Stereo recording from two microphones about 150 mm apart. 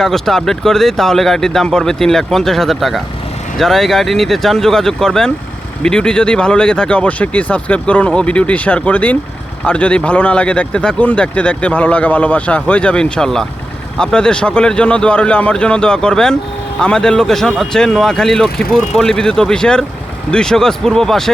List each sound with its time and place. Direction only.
0.0 s speech: centre (ahead or behind)